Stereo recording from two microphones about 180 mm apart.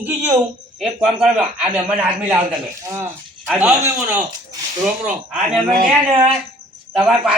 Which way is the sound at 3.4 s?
5° right (ahead or behind).